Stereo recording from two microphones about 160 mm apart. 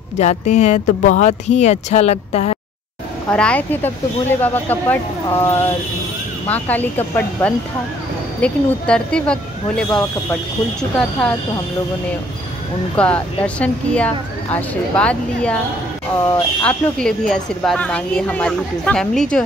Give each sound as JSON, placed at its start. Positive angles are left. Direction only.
{"t": 0.2, "sound": "speech", "side_deg": 45}
{"t": 3.3, "sound": "a woman's voice", "side_deg": 5}
{"t": 12.9, "sound": "a woman's voice", "side_deg": 10}
{"t": 16.6, "sound": "a woman's voice", "side_deg": 5}